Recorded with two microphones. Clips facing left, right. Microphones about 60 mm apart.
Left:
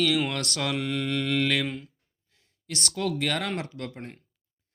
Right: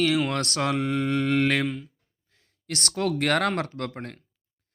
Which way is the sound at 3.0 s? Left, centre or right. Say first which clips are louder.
Right 5 dB; right.